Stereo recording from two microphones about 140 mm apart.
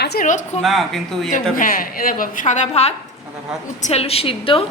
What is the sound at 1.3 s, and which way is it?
A woman's voice, 75° left (ahead or behind).